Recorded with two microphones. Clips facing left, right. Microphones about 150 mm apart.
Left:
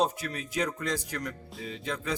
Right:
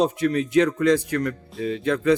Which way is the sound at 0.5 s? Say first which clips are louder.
Right 12 dB; 65° right (ahead or behind).